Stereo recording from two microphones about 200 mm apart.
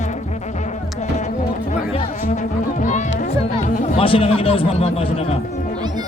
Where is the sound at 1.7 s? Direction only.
35° left (ahead or behind).